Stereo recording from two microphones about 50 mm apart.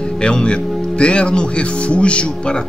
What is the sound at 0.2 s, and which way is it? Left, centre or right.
Speech, centre.